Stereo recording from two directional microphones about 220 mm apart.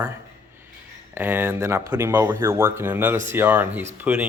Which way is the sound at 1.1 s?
10° right (ahead or behind).